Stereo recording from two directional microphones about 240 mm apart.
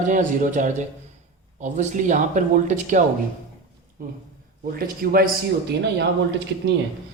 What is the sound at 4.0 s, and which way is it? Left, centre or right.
A man's voice, right.